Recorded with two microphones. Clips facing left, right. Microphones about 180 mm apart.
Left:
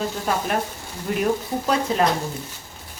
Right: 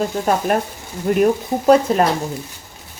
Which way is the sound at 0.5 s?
45° right (ahead or behind).